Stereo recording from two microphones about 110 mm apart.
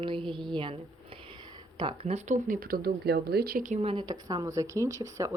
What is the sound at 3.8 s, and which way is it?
Speech, 60° right (ahead or behind).